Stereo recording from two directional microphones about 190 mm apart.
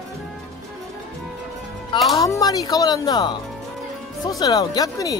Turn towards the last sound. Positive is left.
turn(degrees=20)  # may be behind; listen again after turning